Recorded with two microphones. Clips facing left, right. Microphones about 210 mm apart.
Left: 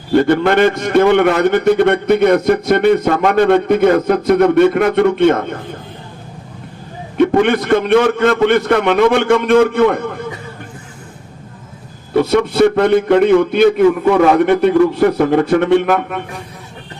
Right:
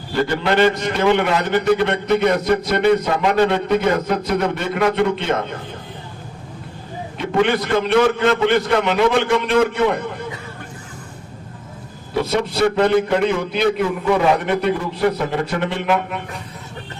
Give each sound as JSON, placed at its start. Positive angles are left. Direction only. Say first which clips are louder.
{"t": 0.1, "sound": "a man's voice", "louder": "left 7 dB", "side_deg": 50}
{"t": 7.2, "sound": "a man's voice", "louder": "left 6 dB", "side_deg": 55}
{"t": 12.1, "sound": "a man's voice", "louder": "left 7 dB", "side_deg": 55}